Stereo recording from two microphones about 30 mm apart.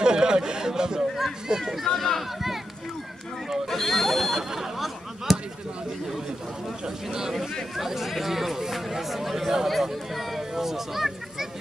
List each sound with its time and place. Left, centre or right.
0.0 s chatter: right
1.6 s speech: centre
2.0 s speech: centre
3.6 s a sound: centre
4.3 s a sound: centre
5.3 s chop: centre
7.1 s speech: centre
7.7 s chatter: centre
9.7 s a sound: centre